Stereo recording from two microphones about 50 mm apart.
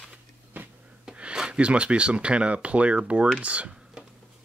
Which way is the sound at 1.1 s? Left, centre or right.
Centre.